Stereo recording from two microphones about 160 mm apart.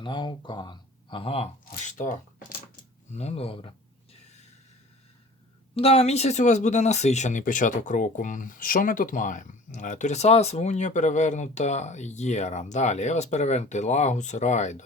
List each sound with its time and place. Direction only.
0.0 s speech: 30° left (ahead or behind)
1.7 s speech: 50° left (ahead or behind)
5.7 s speech: 40° left (ahead or behind)